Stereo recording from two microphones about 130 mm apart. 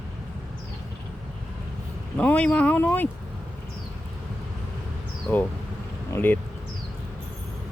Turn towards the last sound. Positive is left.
turn(degrees=15)  # may be behind; listen again after turning